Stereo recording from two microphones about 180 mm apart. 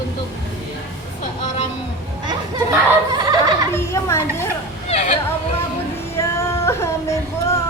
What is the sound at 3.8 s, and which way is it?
Speech, 15° left (ahead or behind).